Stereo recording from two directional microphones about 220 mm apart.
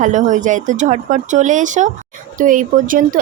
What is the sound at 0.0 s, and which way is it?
Speech, 35° right (ahead or behind).